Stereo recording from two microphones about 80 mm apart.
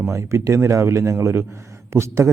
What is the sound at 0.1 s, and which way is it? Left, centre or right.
Speech, right.